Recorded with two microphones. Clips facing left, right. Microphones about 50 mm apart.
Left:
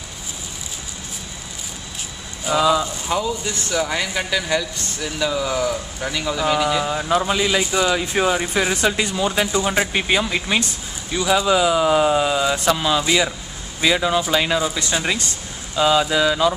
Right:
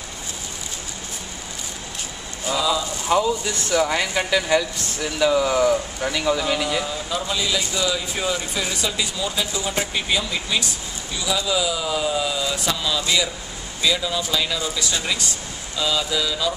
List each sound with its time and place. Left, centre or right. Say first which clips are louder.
2.5 s speech: left 5 dB; left
3.1 s speech: right 6 dB; centre
6.5 s a man's voice: left 4 dB; centre
6.8 s speech: left 6 dB; left